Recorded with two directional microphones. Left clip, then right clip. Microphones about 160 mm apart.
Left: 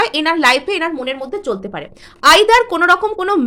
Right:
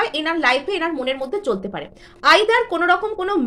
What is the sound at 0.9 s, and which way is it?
Speech, 15° left (ahead or behind).